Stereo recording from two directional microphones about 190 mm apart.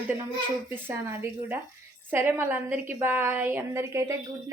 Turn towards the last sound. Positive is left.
turn(degrees=-15)  # may be behind; listen again after turning